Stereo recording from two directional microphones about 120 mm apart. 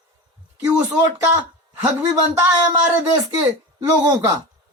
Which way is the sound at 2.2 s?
20° right (ahead or behind).